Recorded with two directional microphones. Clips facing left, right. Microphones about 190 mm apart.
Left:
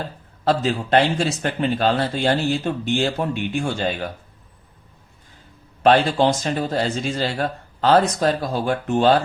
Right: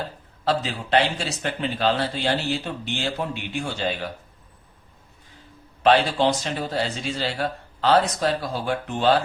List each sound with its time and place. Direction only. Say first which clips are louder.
0.4 s speech: left 5 dB; 50° left (ahead or behind)
5.8 s speech: left 3 dB; 45° left (ahead or behind)